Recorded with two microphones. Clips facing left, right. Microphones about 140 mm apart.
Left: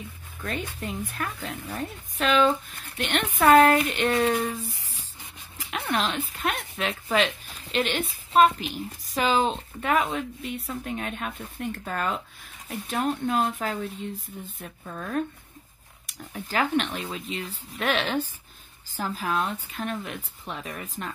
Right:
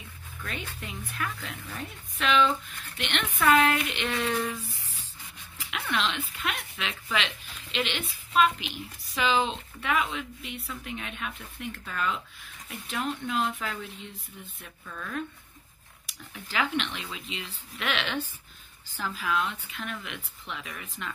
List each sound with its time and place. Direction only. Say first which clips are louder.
0.4 s speech: left 6 dB; 45° left (ahead or behind)
5.7 s speech: left 3 dB; 40° left (ahead or behind)